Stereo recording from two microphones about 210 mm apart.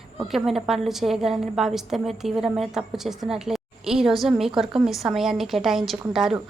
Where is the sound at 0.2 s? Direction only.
Centre (ahead or behind).